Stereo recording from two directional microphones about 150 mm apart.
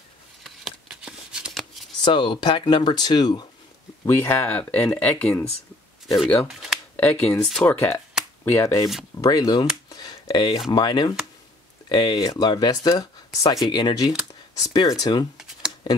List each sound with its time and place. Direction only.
0.4 s shuffling cards: 5° right (ahead or behind)
2.0 s speech: 35° left (ahead or behind); by 5.4 s 10° left (ahead or behind)
6.4 s speech: centre (ahead or behind)
7.0 s speech: 15° left (ahead or behind)
9.8 s a sound: 25° left (ahead or behind)
10.7 s speech: 30° left (ahead or behind)
15.3 s computer keyboard: 5° right (ahead or behind)